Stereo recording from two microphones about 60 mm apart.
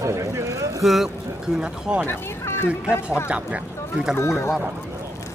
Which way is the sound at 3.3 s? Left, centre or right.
Right.